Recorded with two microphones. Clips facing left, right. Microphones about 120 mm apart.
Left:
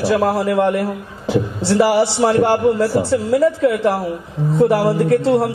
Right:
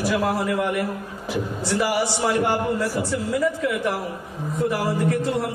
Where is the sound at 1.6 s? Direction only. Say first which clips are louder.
Left 9 dB; 80° left.